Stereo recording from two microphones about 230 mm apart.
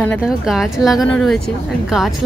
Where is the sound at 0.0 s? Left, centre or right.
Centre.